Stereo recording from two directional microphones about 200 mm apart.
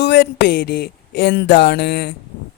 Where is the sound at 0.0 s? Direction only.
55° left (ahead or behind).